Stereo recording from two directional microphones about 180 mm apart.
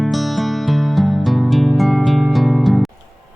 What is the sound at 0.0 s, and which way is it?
Music, centre (ahead or behind).